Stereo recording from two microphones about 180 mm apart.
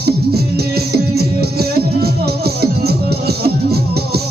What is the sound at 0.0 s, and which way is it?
Music, 60° right (ahead or behind).